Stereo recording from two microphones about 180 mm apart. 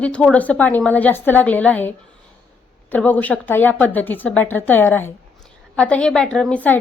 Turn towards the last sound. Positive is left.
turn(degrees=10)  # may be behind; listen again after turning